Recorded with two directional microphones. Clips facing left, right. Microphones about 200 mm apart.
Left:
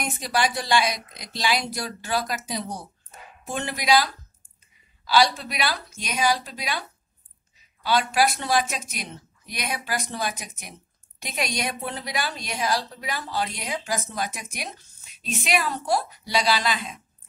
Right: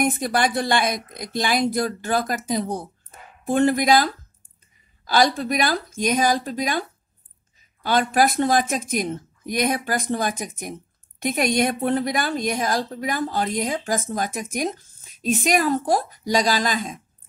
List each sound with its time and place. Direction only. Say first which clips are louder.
0.0 s a woman's voice: right 5 dB; 50° right (ahead or behind)